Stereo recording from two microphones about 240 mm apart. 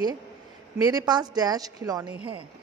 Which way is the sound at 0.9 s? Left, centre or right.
Centre.